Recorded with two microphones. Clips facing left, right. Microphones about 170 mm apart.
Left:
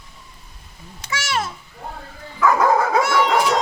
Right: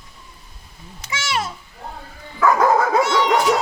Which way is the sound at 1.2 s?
20° right (ahead or behind).